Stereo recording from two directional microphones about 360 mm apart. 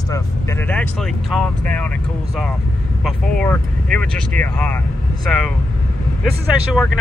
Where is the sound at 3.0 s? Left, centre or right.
Centre.